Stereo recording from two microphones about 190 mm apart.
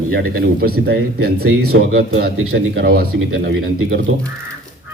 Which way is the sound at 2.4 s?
65° right (ahead or behind).